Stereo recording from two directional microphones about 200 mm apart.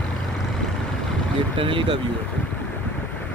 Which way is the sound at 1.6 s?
25° right (ahead or behind).